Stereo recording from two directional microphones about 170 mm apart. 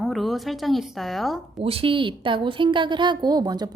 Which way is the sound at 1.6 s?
35° right (ahead or behind).